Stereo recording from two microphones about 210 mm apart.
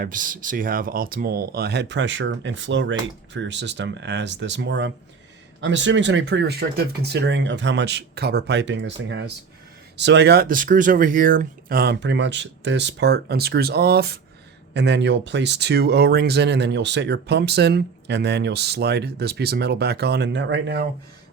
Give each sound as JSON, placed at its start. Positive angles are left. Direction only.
{"t": 0.0, "sound": "speech", "side_deg": -40}